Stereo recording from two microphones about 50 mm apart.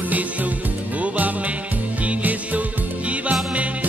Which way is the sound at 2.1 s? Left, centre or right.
Right.